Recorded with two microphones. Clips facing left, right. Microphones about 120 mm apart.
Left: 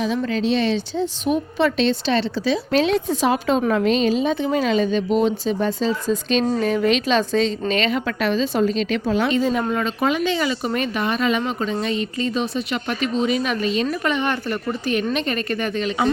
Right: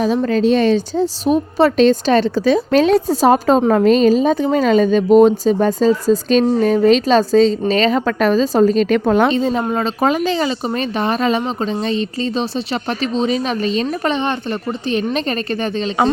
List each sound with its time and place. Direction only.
0.0 s a woman's voice: 45° right (ahead or behind)
9.3 s a woman's voice: 30° right (ahead or behind)